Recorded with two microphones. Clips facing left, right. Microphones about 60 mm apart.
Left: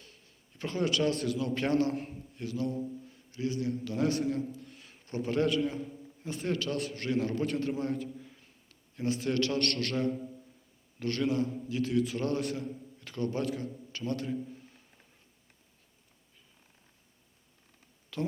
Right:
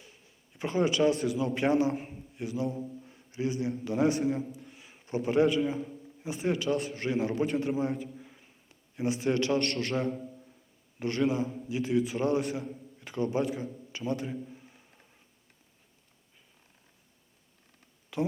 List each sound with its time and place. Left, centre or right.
0.0 s a man's voice: centre
2.6 s a man's voice: centre
3.0 s a sound: right
3.8 s a man's voice: centre
18.1 s a man's voice: centre